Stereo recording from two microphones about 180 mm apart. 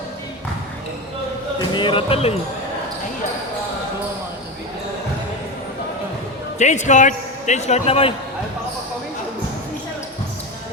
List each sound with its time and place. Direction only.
1.5 s speech: 25° left (ahead or behind)
6.6 s a man's voice: 40° left (ahead or behind)